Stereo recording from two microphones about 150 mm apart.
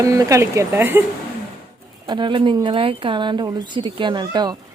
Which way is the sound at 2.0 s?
30° right (ahead or behind).